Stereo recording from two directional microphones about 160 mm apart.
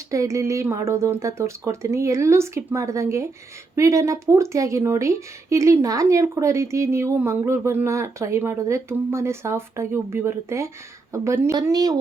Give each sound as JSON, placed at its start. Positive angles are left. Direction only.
{"t": 0.1, "sound": "speech", "side_deg": -20}